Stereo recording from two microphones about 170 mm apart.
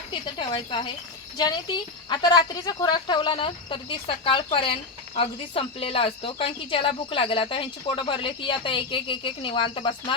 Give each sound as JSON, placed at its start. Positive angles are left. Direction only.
{"t": 0.1, "sound": "a woman's voice", "side_deg": 30}